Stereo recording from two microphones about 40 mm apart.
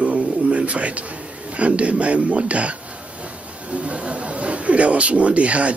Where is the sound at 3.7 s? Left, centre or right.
Right.